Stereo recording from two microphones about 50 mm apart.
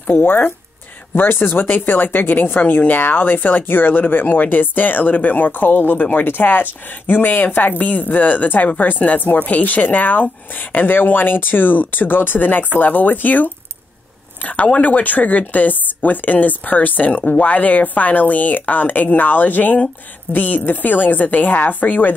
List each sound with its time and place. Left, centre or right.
0.1 s a woman's voice: left